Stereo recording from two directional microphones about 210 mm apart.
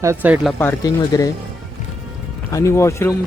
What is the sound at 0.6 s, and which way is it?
Speech, 15° left (ahead or behind).